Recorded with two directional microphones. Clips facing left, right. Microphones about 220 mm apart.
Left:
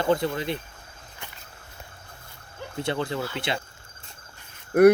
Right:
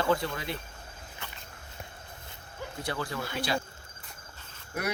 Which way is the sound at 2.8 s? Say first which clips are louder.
Left 7 dB; 25° left (ahead or behind).